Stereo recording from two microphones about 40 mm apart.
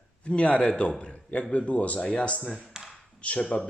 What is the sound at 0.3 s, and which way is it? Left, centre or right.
A man's voice, left.